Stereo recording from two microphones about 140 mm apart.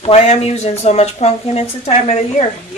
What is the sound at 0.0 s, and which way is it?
Speech, 50° left (ahead or behind).